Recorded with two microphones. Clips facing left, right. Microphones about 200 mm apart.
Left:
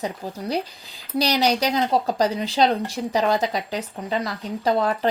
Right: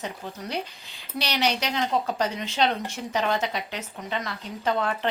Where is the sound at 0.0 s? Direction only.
35° left (ahead or behind).